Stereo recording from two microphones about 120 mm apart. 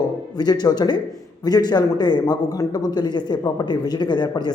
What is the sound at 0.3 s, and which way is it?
Speech, 35° left (ahead or behind).